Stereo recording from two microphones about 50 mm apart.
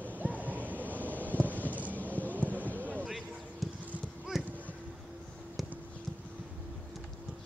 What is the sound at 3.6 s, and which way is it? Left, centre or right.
Clip-clop, centre.